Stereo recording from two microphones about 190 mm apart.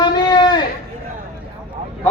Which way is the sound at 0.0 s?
25° left (ahead or behind).